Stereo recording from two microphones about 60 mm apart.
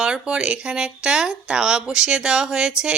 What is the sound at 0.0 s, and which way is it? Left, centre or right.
Speech, centre.